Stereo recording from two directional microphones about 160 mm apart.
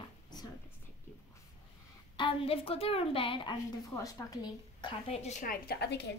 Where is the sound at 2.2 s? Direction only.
35° left (ahead or behind).